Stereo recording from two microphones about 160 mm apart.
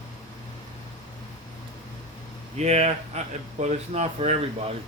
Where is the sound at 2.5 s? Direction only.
45° right (ahead or behind).